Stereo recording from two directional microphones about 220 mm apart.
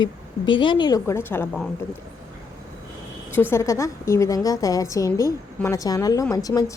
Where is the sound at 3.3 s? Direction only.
10° left (ahead or behind).